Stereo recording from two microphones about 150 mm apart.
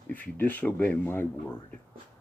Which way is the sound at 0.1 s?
10° left (ahead or behind).